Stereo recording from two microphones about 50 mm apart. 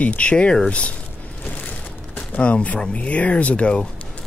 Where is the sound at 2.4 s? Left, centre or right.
Left.